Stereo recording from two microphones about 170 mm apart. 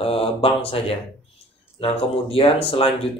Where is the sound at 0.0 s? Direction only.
35° left (ahead or behind).